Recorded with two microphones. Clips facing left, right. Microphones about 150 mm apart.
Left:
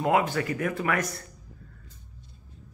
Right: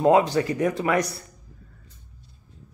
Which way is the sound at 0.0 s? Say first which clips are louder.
Right 6 dB; 25° right (ahead or behind).